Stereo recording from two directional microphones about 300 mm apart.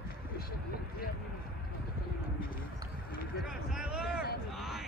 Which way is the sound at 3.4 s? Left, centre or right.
Centre.